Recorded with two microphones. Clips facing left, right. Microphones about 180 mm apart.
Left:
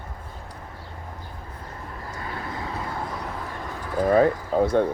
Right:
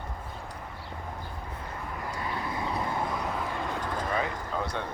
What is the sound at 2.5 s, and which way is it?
Vehicle, 20° right (ahead or behind).